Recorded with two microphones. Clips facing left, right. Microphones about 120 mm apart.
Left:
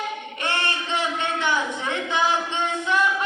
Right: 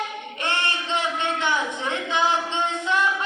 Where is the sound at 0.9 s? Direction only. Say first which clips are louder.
Even; 20° right (ahead or behind).